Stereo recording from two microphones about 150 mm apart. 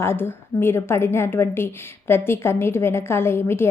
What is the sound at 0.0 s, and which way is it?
A woman's voice, 15° left (ahead or behind).